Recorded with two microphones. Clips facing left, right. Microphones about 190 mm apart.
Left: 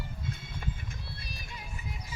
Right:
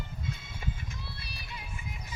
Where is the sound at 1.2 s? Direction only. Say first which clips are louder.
Even; 45° left (ahead or behind).